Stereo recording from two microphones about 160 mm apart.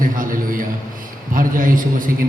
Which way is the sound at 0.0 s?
60° right (ahead or behind).